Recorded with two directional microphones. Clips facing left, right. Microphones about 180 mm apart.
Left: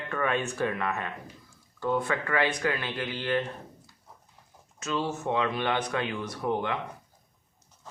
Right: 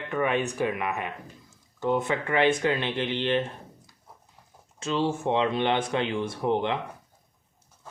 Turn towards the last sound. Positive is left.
turn(degrees=-25)  # may be behind; listen again after turning